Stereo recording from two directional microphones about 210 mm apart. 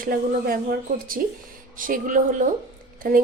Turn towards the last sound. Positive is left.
turn(degrees=-40)  # may be behind; listen again after turning